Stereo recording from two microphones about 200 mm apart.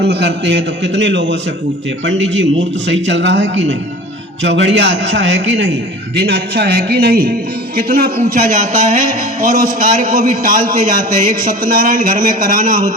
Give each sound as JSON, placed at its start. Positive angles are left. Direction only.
{"t": 0.0, "sound": "a man's voice", "side_deg": -60}